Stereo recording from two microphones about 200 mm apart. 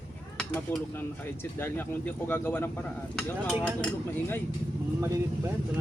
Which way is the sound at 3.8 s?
10° left (ahead or behind).